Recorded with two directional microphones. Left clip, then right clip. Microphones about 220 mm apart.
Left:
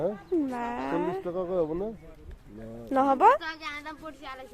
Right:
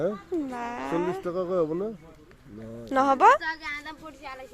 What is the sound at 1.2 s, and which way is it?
Speech, 35° right (ahead or behind).